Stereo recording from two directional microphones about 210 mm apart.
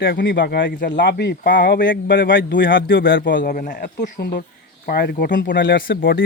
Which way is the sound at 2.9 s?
60° left (ahead or behind).